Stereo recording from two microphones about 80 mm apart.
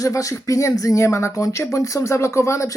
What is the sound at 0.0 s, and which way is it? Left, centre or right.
Speech, left.